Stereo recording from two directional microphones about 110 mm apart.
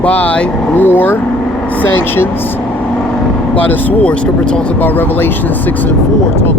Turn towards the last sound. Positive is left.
turn(degrees=15)  # may be behind; listen again after turning